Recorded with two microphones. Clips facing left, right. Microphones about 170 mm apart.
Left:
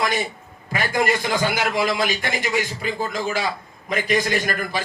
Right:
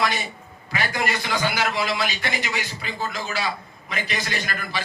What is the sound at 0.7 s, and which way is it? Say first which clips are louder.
A man's voice: left 4 dB; 45° left (ahead or behind).